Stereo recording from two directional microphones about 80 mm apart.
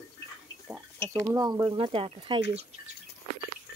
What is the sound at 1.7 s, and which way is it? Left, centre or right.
Speech, right.